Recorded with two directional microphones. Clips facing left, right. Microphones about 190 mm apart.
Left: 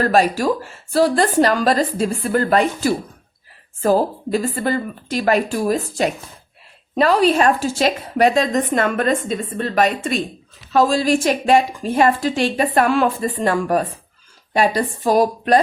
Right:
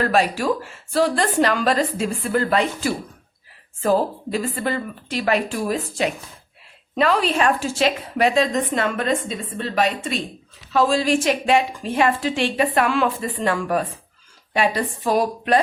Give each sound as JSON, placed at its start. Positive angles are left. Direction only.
{"t": 0.0, "sound": "a woman's voice", "side_deg": 40}